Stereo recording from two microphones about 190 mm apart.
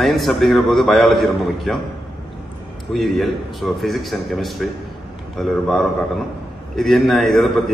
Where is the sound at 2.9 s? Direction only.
Centre (ahead or behind).